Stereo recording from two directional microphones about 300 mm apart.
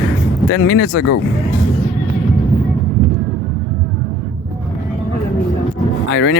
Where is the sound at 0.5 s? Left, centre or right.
Left.